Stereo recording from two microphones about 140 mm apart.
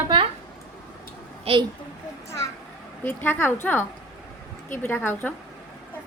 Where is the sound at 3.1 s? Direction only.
15° left (ahead or behind).